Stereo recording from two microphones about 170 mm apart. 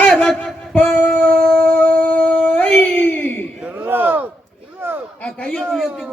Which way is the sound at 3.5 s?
10° right (ahead or behind).